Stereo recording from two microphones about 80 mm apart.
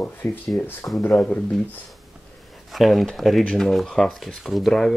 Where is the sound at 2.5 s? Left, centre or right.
Centre.